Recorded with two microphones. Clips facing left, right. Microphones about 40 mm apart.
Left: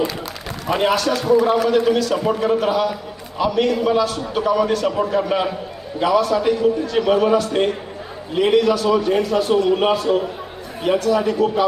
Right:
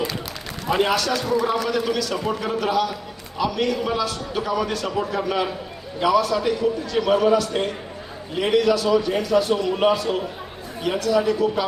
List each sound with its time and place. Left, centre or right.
0.9 s a man's voice: left